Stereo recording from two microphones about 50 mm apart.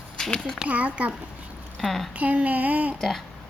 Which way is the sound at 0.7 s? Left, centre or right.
Right.